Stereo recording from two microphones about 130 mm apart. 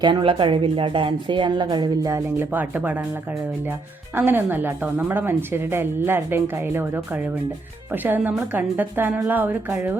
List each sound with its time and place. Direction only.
0.0 s a woman's voice: 40° right (ahead or behind)
2.0 s speech: 25° right (ahead or behind)
2.5 s speech: 15° right (ahead or behind)